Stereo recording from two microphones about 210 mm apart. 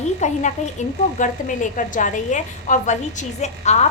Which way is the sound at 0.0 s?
35° left (ahead or behind).